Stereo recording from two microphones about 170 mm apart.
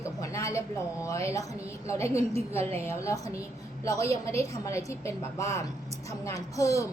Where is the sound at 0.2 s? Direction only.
20° left (ahead or behind).